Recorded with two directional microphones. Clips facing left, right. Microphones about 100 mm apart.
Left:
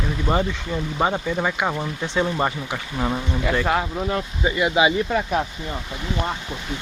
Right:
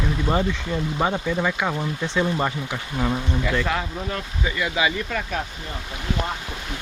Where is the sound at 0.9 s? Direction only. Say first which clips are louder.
Left 2 dB; 15° left (ahead or behind).